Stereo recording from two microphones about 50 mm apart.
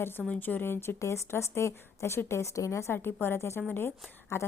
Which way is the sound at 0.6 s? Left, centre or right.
Left.